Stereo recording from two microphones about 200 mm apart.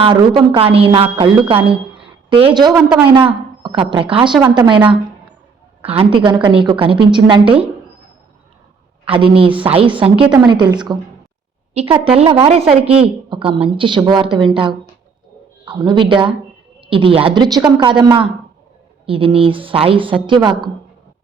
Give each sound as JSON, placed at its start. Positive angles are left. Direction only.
{"t": 0.0, "sound": "a woman's voice", "side_deg": -25}
{"t": 2.7, "sound": "a woman's voice", "side_deg": -5}
{"t": 3.2, "sound": "a sound", "side_deg": -25}
{"t": 3.8, "sound": "a woman's voice", "side_deg": -25}
{"t": 5.8, "sound": "a woman's voice", "side_deg": -30}
{"t": 9.0, "sound": "a woman's voice", "side_deg": -25}